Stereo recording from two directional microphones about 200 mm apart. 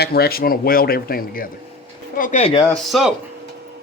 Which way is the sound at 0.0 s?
50° left (ahead or behind).